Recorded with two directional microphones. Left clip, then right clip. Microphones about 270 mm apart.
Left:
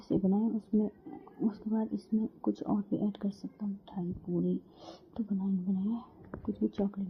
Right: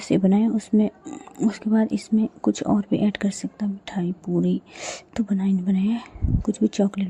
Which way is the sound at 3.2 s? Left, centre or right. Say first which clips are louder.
Right 11 dB; right.